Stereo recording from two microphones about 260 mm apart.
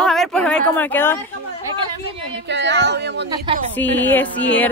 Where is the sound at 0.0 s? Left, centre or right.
Centre.